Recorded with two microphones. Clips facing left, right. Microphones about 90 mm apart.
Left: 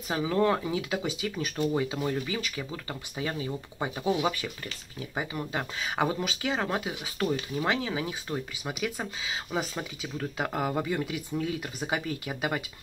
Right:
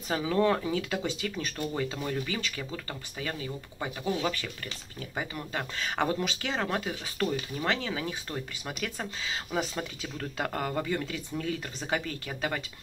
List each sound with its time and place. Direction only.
0.1 s speech: 5° left (ahead or behind)
3.2 s speech: 20° left (ahead or behind)